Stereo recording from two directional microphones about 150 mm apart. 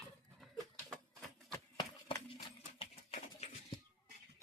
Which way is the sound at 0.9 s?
5° left (ahead or behind).